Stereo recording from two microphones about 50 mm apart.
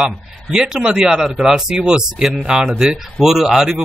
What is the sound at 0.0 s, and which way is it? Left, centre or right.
Speech, centre.